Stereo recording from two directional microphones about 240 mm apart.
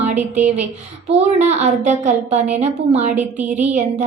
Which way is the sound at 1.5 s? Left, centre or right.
Right.